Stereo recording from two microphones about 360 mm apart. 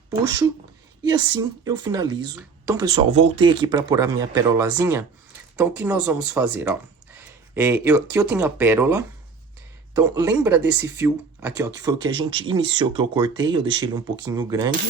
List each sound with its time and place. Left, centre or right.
1.0 s speech: centre
10.6 s speech: right
10.8 s speech: centre